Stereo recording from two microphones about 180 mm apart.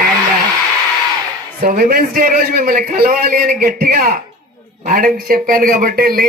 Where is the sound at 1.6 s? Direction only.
55° right (ahead or behind).